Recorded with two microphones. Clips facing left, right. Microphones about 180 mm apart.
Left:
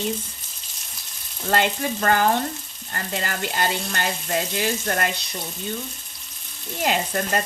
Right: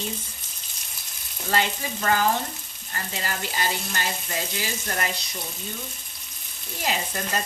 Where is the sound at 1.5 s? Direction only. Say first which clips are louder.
Left 4 dB; 55° left (ahead or behind).